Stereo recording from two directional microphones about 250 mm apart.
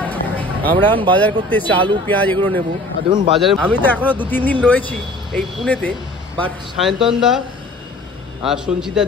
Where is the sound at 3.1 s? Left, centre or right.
Centre.